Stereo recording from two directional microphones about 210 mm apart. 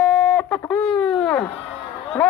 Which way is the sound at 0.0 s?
5° left (ahead or behind).